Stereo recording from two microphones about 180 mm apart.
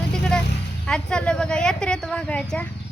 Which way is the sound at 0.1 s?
5° left (ahead or behind).